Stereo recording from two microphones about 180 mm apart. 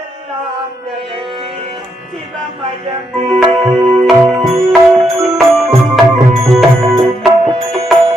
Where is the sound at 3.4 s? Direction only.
Centre (ahead or behind).